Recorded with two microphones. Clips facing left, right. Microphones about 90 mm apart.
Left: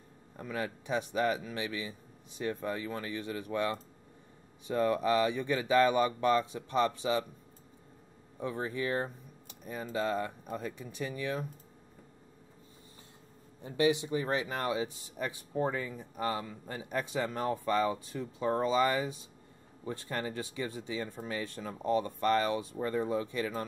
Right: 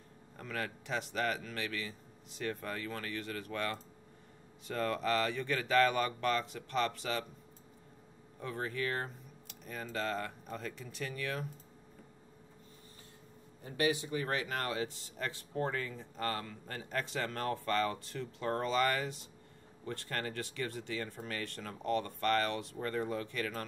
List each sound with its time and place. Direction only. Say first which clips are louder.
0.4 s speech: left 3 dB; 15° left (ahead or behind)
8.4 s speech: left 3 dB; 15° left (ahead or behind)
13.7 s speech: left 4 dB; 25° left (ahead or behind)